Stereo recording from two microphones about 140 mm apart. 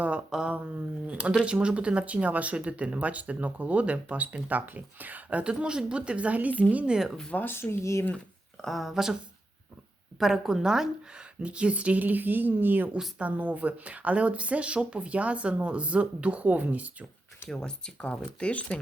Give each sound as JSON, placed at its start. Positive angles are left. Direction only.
{"t": 0.0, "sound": "speech", "side_deg": -10}
{"t": 7.3, "sound": "speech", "side_deg": 15}
{"t": 8.6, "sound": "speech", "side_deg": 0}
{"t": 10.2, "sound": "speech", "side_deg": 0}
{"t": 17.5, "sound": "speech", "side_deg": 5}